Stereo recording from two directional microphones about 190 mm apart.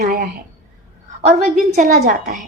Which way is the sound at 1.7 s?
50° right (ahead or behind).